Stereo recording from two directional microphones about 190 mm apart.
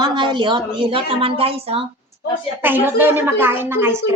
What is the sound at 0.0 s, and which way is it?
A woman's voice, 25° right (ahead or behind).